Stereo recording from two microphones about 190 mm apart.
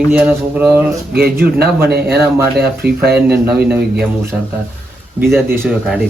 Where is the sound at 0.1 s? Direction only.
10° right (ahead or behind).